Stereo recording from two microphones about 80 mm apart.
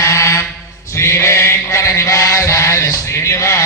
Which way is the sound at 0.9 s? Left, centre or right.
Left.